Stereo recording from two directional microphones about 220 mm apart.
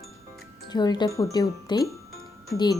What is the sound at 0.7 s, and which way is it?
Speech, 20° left (ahead or behind).